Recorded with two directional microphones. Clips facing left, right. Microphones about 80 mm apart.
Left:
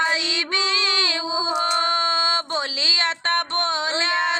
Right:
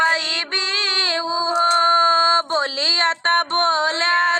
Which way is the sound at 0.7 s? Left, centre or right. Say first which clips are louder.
Even; right.